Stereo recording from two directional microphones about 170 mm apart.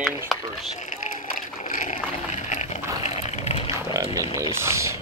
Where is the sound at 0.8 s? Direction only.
45° left (ahead or behind).